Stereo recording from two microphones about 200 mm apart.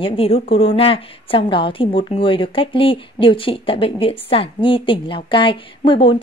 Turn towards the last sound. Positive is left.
turn(degrees=25)  # may be behind; listen again after turning